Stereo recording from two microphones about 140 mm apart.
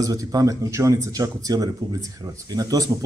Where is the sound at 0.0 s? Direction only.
25° right (ahead or behind).